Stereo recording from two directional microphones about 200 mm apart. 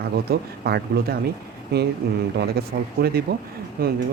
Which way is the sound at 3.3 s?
50° right (ahead or behind).